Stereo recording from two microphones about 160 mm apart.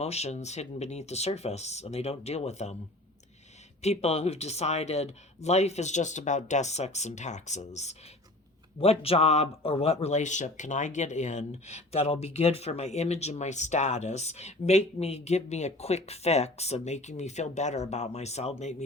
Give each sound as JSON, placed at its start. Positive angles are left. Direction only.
{"t": 0.0, "sound": "speech", "side_deg": 40}
{"t": 3.8, "sound": "speech", "side_deg": 40}